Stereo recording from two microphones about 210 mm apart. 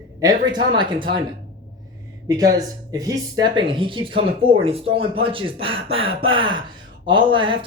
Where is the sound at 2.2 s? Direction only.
15° right (ahead or behind).